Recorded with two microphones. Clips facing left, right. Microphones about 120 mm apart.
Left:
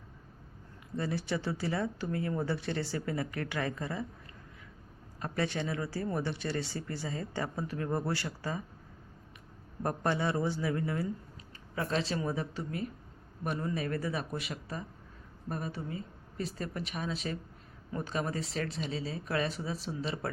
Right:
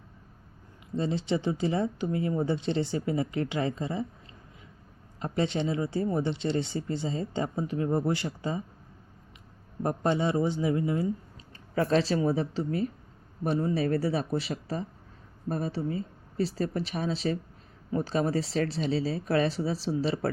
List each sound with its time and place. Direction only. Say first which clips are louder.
0.9 s speech: right 5 dB; 20° right (ahead or behind)
5.2 s speech: right 5 dB; 20° right (ahead or behind)
9.8 s speech: right 4 dB; 20° right (ahead or behind)
11.7 s speech: right 8 dB; 40° right (ahead or behind)